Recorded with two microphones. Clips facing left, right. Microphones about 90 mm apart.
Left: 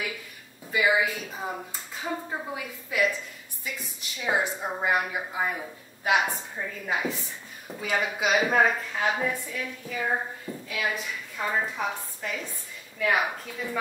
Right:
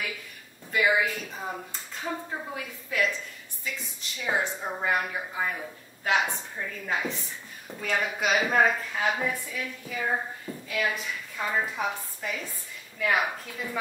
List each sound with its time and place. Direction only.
0.7 s speech: 5° left (ahead or behind)
4.2 s a woman's voice: 15° left (ahead or behind)